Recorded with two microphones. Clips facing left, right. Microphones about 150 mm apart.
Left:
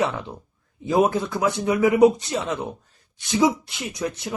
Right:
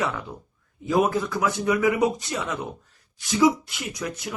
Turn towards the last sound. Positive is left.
turn(degrees=25)  # may be behind; listen again after turning